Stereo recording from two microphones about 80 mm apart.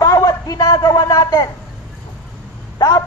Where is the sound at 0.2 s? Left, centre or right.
Left.